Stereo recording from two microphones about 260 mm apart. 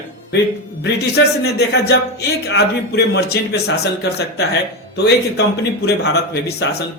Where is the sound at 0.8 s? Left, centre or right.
Left.